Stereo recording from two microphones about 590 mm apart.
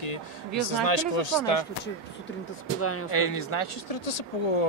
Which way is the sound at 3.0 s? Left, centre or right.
Left.